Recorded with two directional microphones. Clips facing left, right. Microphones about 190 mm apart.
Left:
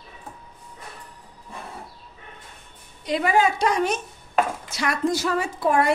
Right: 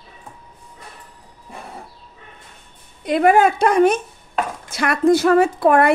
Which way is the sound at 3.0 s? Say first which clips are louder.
Right 7 dB; 55° right (ahead or behind).